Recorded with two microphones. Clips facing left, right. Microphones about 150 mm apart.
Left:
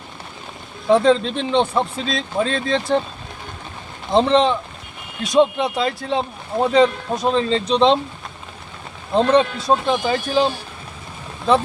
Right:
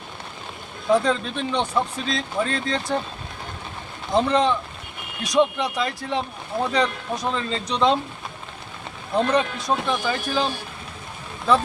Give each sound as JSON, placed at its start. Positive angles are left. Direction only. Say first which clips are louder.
{"t": 0.9, "sound": "speech", "louder": "left 6 dB", "side_deg": 25}
{"t": 4.1, "sound": "speech", "louder": "left 4 dB", "side_deg": 25}
{"t": 9.1, "sound": "speech", "louder": "left 5 dB", "side_deg": 25}